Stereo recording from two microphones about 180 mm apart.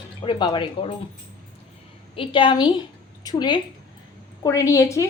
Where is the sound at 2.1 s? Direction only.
30° left (ahead or behind).